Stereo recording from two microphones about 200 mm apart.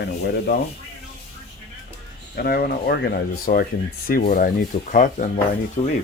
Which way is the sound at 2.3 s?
50° left (ahead or behind).